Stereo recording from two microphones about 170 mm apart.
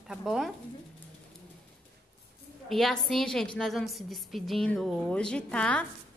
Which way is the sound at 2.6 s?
Centre (ahead or behind).